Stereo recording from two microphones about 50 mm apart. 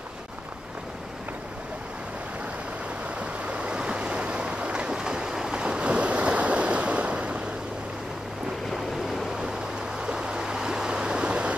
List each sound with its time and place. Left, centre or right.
3.2 s waves: right
9.9 s waves: centre